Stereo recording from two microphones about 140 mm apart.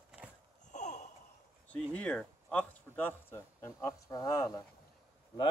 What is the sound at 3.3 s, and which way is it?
Speech, 20° left (ahead or behind).